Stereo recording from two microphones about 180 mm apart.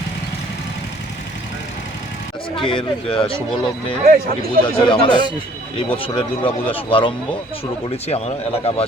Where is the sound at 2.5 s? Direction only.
30° left (ahead or behind).